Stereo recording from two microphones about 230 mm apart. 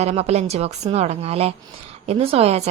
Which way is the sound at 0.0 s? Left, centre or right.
Right.